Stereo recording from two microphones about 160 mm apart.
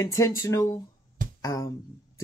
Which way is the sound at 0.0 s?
20° left (ahead or behind).